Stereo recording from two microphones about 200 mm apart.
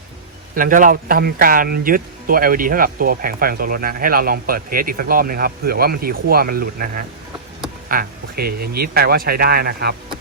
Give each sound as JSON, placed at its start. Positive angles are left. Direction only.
{"t": 0.5, "sound": "speech", "side_deg": -40}